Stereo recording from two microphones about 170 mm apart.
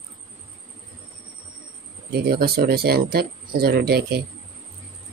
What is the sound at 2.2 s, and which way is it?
Speech, 65° right (ahead or behind).